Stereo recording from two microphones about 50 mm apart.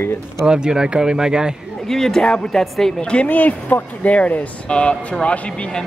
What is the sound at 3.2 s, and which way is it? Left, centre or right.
Speech, left.